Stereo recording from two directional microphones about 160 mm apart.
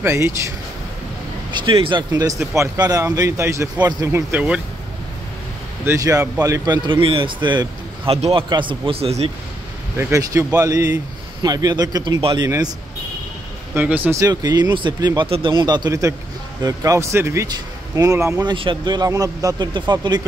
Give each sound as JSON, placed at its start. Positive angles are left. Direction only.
{"t": 0.0, "sound": "speech", "side_deg": -15}
{"t": 1.5, "sound": "a man's voice", "side_deg": -30}
{"t": 5.9, "sound": "a man's voice", "side_deg": -20}
{"t": 9.9, "sound": "a man's voice", "side_deg": -20}
{"t": 12.2, "sound": "speech", "side_deg": -35}
{"t": 12.4, "sound": "a man's voice", "side_deg": -20}
{"t": 13.7, "sound": "a man's voice", "side_deg": -10}